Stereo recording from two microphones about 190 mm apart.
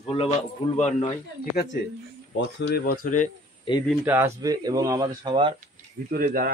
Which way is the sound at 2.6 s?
55° left (ahead or behind).